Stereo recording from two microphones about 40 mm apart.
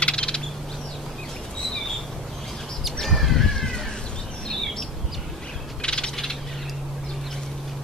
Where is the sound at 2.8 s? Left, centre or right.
Centre.